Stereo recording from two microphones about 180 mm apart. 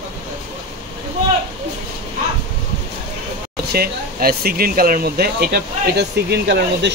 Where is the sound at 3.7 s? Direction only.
55° right (ahead or behind).